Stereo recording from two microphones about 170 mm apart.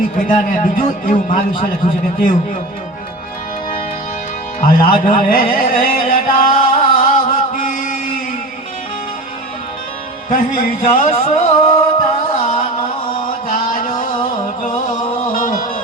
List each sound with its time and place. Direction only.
0.2 s a man's voice: 55° left (ahead or behind)
4.6 s music: 55° left (ahead or behind)
10.2 s a man's voice: 55° left (ahead or behind)
11.1 s music: 40° left (ahead or behind)
13.7 s music: 55° left (ahead or behind)